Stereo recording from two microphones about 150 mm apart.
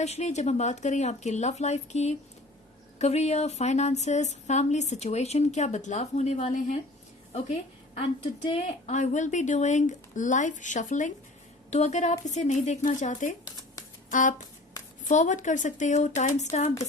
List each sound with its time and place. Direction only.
0.0 s speech: 50° left (ahead or behind)